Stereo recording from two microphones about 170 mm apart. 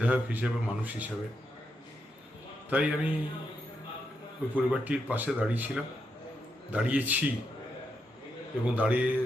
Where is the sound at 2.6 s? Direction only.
10° right (ahead or behind).